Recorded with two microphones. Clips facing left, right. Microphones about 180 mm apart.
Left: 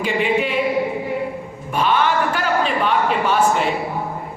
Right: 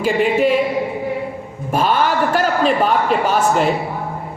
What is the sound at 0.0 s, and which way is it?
Speech, 40° right (ahead or behind).